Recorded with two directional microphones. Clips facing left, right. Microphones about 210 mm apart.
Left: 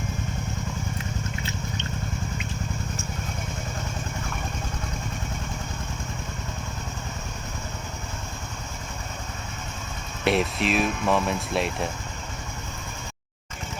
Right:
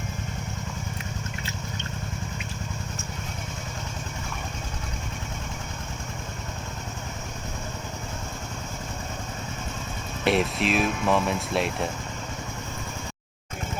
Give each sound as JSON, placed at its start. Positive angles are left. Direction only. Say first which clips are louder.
{"t": 10.2, "sound": "speech", "louder": "even", "side_deg": 0}